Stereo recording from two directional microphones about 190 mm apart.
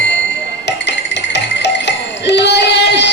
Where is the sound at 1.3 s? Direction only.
65° left (ahead or behind).